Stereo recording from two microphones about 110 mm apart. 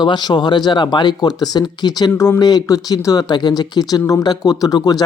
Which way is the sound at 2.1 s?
25° left (ahead or behind).